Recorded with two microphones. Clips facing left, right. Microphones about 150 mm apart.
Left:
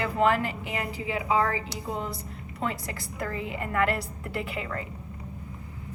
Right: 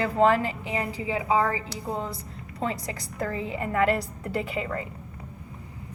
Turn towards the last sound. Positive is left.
turn(degrees=-25)  # may be behind; listen again after turning